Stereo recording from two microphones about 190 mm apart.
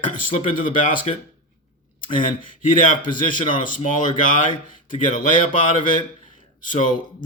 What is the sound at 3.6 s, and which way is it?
A man's voice, 45° left (ahead or behind).